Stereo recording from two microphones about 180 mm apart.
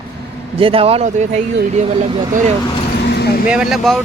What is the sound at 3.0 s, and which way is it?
Vehicle, 65° left (ahead or behind).